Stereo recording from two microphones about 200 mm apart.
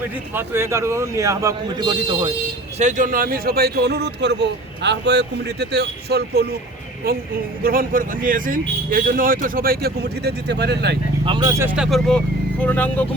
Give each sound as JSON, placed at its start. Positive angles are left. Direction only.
{"t": 0.3, "sound": "speech", "side_deg": -10}
{"t": 2.7, "sound": "speech", "side_deg": -35}
{"t": 11.3, "sound": "speech", "side_deg": -20}
{"t": 11.8, "sound": "speech", "side_deg": 0}